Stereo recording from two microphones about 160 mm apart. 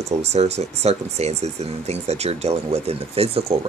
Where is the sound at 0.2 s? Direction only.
45° right (ahead or behind).